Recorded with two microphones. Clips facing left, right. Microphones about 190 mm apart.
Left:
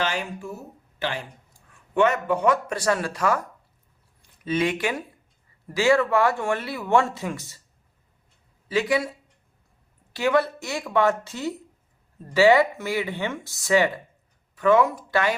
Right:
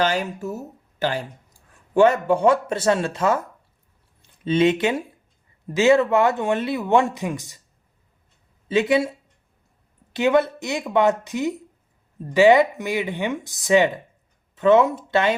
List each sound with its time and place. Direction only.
0.0 s speech: 40° right (ahead or behind); by 7.6 s 15° right (ahead or behind)
8.6 s speech: 25° right (ahead or behind)